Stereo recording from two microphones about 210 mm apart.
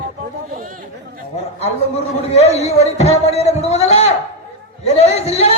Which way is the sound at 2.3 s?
30° left (ahead or behind).